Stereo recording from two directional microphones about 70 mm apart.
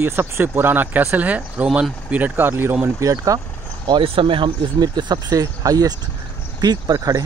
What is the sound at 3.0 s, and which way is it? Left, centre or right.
Speech, right.